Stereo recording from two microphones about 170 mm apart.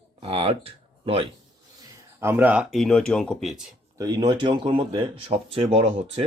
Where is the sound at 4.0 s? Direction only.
25° right (ahead or behind).